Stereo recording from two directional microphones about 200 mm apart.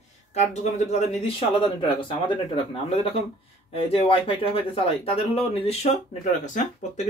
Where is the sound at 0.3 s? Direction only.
35° left (ahead or behind).